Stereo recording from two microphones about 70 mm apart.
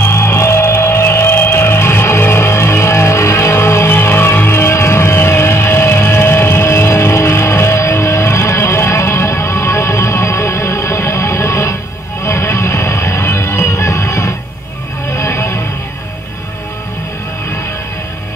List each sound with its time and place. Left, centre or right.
0.0 s music: left